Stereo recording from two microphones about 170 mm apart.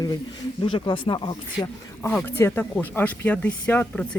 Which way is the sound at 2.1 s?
10° left (ahead or behind).